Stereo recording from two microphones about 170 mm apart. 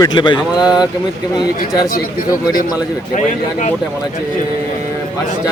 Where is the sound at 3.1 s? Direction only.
45° left (ahead or behind).